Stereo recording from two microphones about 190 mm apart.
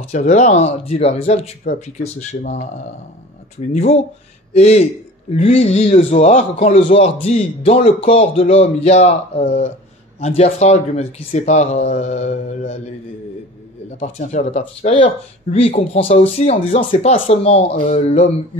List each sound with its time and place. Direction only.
0.1 s speech: 40° left (ahead or behind)
3.7 s speech: 35° left (ahead or behind)
13.9 s speech: 35° left (ahead or behind)